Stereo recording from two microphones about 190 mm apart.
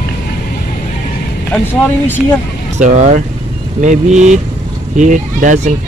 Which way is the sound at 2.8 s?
40° right (ahead or behind).